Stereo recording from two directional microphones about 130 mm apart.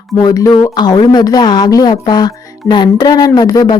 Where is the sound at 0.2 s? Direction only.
30° left (ahead or behind).